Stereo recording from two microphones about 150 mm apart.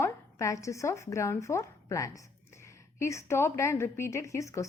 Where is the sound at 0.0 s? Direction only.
20° left (ahead or behind).